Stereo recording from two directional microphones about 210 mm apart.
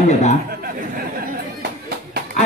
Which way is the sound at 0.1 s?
35° left (ahead or behind).